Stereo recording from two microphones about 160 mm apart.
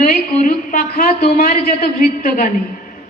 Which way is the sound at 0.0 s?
55° left (ahead or behind).